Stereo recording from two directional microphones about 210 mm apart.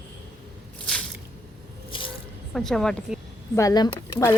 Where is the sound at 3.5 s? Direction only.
15° left (ahead or behind).